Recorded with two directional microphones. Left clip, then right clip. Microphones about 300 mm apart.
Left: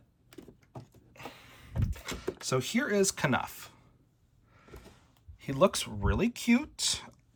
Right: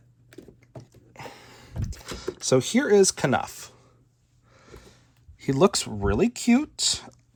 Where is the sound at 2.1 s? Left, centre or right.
Centre.